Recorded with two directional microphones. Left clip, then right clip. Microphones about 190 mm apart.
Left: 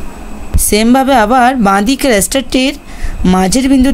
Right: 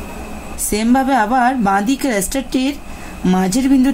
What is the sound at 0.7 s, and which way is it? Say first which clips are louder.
Speech: left 6 dB; 45° left (ahead or behind).